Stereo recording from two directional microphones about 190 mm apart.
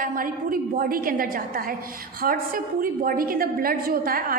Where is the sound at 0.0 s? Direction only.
50° right (ahead or behind).